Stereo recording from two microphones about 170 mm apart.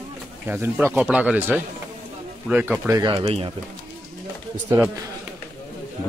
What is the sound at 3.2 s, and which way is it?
Speech, 35° right (ahead or behind).